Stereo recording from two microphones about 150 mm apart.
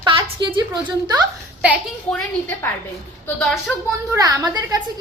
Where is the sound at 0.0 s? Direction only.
30° right (ahead or behind).